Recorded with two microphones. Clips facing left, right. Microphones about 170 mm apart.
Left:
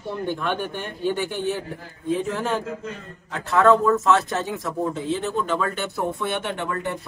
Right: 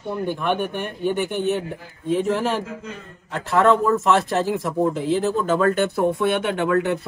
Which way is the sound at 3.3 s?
30° right (ahead or behind).